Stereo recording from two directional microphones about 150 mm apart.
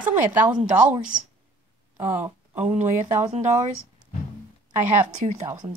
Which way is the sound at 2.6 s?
45° right (ahead or behind).